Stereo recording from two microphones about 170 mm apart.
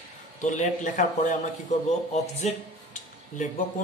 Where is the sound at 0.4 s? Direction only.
45° left (ahead or behind).